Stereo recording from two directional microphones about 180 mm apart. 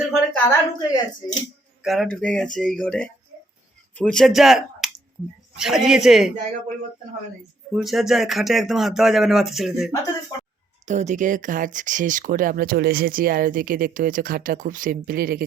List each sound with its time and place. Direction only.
0.0 s a sound: 5° left (ahead or behind)
0.8 s speech: 20° left (ahead or behind)
1.8 s speech: centre (ahead or behind)
7.7 s speech: centre (ahead or behind)
10.8 s speech: 40° right (ahead or behind)